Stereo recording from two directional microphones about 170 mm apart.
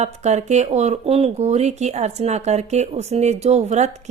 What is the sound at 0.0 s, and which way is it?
A woman's voice, 40° right (ahead or behind).